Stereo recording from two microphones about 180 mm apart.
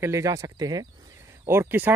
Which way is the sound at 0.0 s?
15° right (ahead or behind).